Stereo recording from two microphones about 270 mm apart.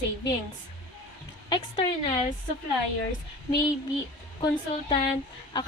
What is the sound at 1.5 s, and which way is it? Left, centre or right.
Speech, centre.